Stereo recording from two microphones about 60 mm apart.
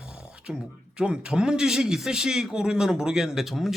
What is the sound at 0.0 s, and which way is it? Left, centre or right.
Beatboxing, centre.